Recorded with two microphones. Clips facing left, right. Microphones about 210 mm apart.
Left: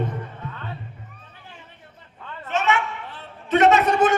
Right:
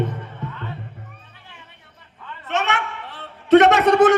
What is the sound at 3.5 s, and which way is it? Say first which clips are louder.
Speech: right 4 dB; 70° right (ahead or behind).